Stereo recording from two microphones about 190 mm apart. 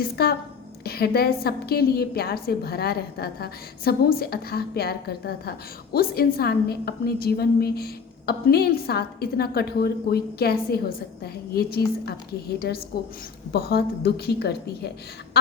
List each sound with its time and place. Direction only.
0.0 s a woman's voice: 55° left (ahead or behind)